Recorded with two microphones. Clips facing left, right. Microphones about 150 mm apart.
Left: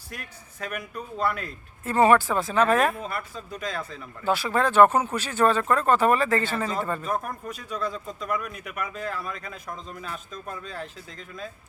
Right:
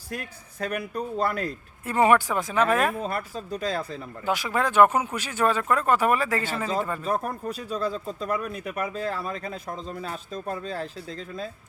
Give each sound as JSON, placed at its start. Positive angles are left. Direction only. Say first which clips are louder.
{"t": 0.1, "sound": "speech", "louder": "right 6 dB", "side_deg": -35}
{"t": 1.8, "sound": "speech", "louder": "left 1 dB", "side_deg": -15}
{"t": 3.0, "sound": "speech", "louder": "right 3 dB", "side_deg": -40}
{"t": 4.2, "sound": "speech", "louder": "left 2 dB", "side_deg": -15}
{"t": 7.0, "sound": "speech", "louder": "right 2 dB", "side_deg": -35}